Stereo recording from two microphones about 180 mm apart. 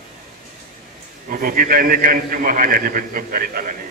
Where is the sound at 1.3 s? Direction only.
50° right (ahead or behind).